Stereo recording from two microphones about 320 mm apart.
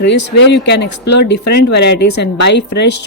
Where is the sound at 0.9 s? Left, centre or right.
Left.